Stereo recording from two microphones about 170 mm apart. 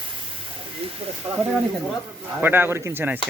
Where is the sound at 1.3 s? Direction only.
10° right (ahead or behind).